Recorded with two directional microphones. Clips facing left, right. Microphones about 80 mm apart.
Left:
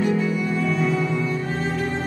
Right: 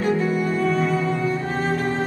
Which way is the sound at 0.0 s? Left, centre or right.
Right.